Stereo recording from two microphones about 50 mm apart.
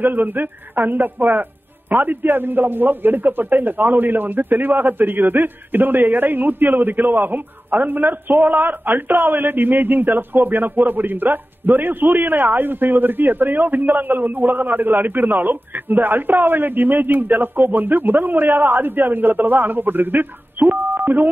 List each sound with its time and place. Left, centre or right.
0.0 s speech: right